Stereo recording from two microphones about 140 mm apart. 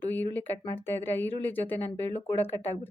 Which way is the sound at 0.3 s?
15° left (ahead or behind).